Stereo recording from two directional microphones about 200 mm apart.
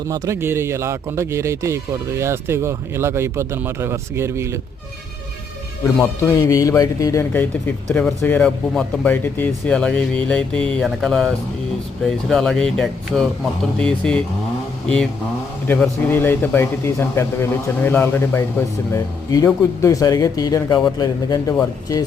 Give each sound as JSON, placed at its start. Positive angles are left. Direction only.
{"t": 0.1, "sound": "speech", "side_deg": -15}
{"t": 6.2, "sound": "speech", "side_deg": 15}
{"t": 15.6, "sound": "speech", "side_deg": 10}